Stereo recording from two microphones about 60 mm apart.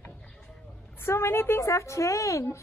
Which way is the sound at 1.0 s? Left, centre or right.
Left.